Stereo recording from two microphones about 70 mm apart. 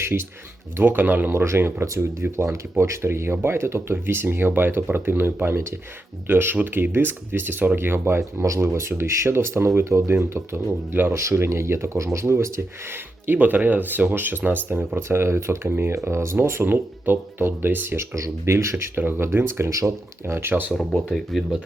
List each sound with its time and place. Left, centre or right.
0.0 s speech: right
11.1 s speech: right
13.2 s speech: right
18.1 s speech: right
18.9 s speech: right
20.7 s speech: centre